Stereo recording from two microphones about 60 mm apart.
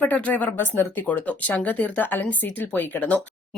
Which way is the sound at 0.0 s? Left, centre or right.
Left.